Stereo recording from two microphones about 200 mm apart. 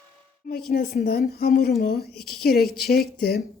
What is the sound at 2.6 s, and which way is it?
Speech, centre (ahead or behind).